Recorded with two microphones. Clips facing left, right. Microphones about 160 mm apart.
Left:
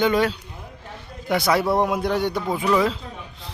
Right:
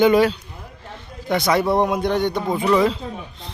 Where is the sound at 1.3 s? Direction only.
5° left (ahead or behind).